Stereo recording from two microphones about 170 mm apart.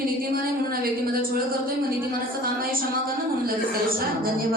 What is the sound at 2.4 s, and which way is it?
A woman's voice, 60° right (ahead or behind).